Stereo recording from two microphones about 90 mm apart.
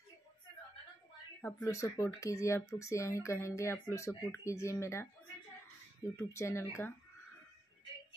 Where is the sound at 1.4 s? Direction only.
35° left (ahead or behind).